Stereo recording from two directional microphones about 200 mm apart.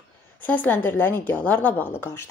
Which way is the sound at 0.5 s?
10° left (ahead or behind).